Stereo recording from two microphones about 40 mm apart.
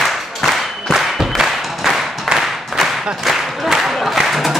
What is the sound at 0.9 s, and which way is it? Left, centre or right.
Music, centre.